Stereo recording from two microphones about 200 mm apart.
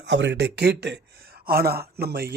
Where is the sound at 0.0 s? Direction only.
60° right (ahead or behind).